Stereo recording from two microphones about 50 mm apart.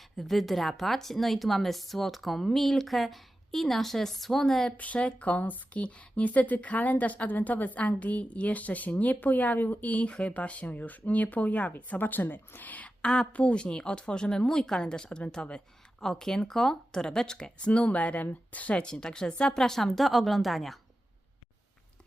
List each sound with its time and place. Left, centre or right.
0.0 s speech: centre
4.8 s speech: left
13.0 s a woman's voice: centre